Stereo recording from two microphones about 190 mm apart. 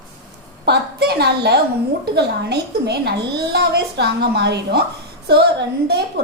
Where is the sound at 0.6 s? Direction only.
60° right (ahead or behind).